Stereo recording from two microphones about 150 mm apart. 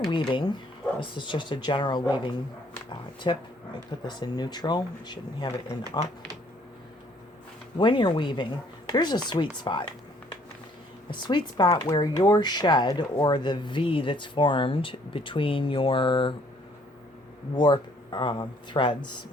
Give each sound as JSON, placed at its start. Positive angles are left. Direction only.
{"t": 0.1, "sound": "speech", "side_deg": 35}
{"t": 7.8, "sound": "speech", "side_deg": 35}
{"t": 11.1, "sound": "speech", "side_deg": 30}
{"t": 17.5, "sound": "speech", "side_deg": 30}